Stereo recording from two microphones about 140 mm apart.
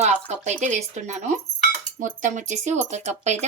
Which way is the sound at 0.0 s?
55° right (ahead or behind).